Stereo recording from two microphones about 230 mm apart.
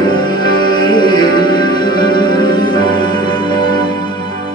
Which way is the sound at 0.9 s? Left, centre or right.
Centre.